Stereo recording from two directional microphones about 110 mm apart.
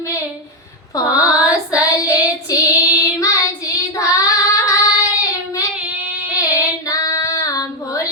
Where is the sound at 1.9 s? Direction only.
30° left (ahead or behind).